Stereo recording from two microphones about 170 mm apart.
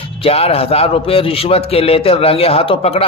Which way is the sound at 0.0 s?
35° left (ahead or behind).